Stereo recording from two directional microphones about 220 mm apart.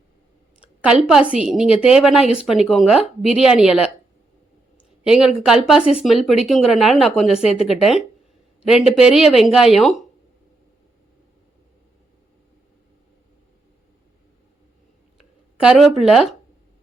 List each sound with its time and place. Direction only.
0.6 s a sound: 5° right (ahead or behind)
1.0 s a woman's voice: 5° right (ahead or behind)
5.0 s a woman's voice: 5° right (ahead or behind)
7.4 s speech: 25° left (ahead or behind)
7.7 s a woman's voice: centre (ahead or behind)
15.5 s a woman's voice: 5° right (ahead or behind)